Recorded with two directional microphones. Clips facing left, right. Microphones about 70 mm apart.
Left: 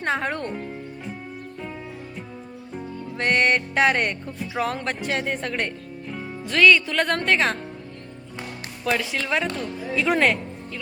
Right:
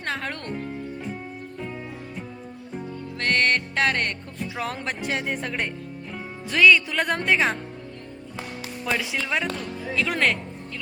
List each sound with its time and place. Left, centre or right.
0.0 s speech: centre
3.2 s music: centre
4.5 s speech: centre
8.8 s speech: centre
9.9 s music: centre